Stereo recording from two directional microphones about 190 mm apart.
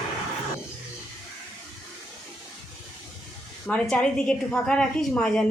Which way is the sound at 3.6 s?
5° left (ahead or behind).